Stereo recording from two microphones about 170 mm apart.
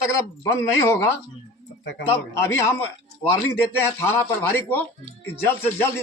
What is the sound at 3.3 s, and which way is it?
Speech, 15° left (ahead or behind).